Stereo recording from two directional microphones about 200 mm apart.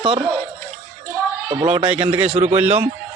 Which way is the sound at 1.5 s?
25° right (ahead or behind).